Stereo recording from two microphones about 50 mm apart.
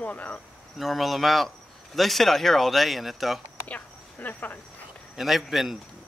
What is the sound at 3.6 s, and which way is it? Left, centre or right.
Speech, left.